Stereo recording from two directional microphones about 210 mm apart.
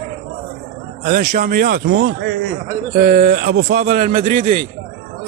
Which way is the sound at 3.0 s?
35° right (ahead or behind).